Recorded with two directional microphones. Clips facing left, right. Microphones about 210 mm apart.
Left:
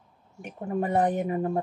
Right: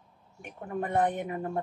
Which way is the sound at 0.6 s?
30° left (ahead or behind).